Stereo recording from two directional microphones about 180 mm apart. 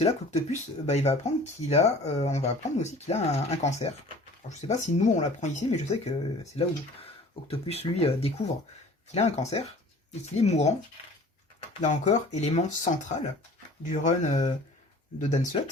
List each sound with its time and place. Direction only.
0.0 s speech: 40° left (ahead or behind)
7.4 s speech: 35° left (ahead or behind)
11.8 s speech: 40° left (ahead or behind)